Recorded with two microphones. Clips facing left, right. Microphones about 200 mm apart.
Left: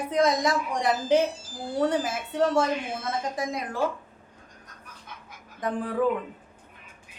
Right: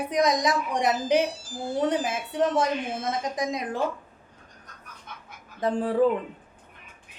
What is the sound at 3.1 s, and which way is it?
Speech, 20° right (ahead or behind).